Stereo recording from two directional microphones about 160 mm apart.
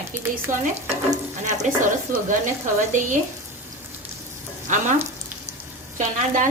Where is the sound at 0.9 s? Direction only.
45° right (ahead or behind).